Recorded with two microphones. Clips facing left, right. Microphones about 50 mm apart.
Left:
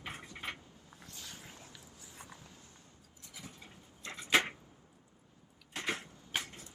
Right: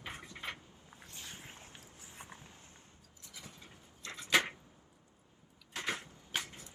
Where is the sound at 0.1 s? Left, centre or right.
Centre.